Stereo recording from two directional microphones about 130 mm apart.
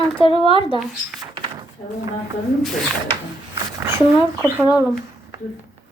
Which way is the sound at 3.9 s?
20° right (ahead or behind).